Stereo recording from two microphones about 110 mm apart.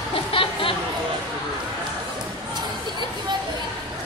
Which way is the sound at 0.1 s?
55° left (ahead or behind).